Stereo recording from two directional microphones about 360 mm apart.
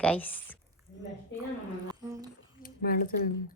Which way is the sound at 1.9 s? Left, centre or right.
Centre.